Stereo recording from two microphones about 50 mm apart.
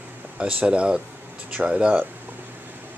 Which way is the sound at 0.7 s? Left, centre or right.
Centre.